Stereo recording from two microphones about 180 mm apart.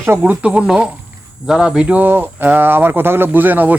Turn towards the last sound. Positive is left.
turn(degrees=-10)  # may be behind; listen again after turning